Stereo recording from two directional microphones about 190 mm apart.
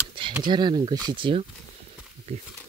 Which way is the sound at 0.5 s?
25° right (ahead or behind).